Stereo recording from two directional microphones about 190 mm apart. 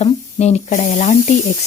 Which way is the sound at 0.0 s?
35° left (ahead or behind).